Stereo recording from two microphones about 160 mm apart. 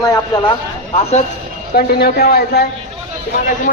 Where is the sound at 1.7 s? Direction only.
80° left.